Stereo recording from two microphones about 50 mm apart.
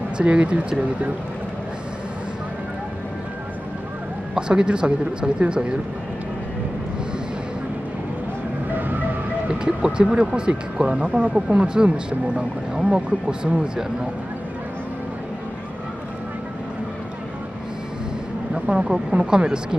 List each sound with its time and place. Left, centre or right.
0.2 s speech: right
4.4 s speech: centre
8.7 s music: right
9.5 s speech: centre
18.5 s speech: centre